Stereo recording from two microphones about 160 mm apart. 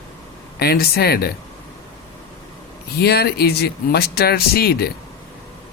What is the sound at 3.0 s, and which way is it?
Speech, 85° left.